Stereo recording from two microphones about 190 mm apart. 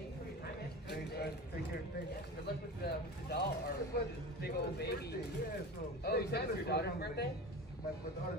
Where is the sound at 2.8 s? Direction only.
55° left (ahead or behind).